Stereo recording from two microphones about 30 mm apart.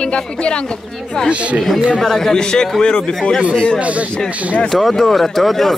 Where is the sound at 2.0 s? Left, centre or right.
Centre.